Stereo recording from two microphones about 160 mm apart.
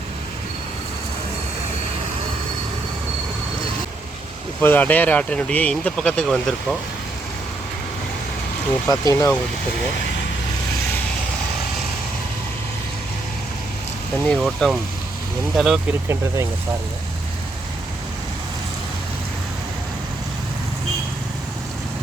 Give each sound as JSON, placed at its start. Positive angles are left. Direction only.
{"t": 4.6, "sound": "speech", "side_deg": 10}
{"t": 8.9, "sound": "speech", "side_deg": 20}
{"t": 14.3, "sound": "speech", "side_deg": -5}
{"t": 15.9, "sound": "speech", "side_deg": -15}